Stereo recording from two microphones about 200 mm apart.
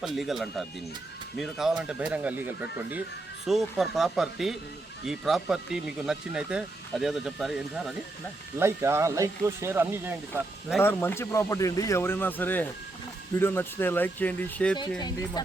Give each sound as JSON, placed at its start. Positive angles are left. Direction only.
{"t": 0.0, "sound": "speech", "side_deg": 0}
{"t": 8.5, "sound": "speech", "side_deg": -10}
{"t": 10.8, "sound": "speech", "side_deg": 10}
{"t": 14.8, "sound": "speech", "side_deg": 20}